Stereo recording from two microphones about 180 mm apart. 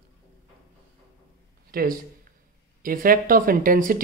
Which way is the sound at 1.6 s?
55° right (ahead or behind).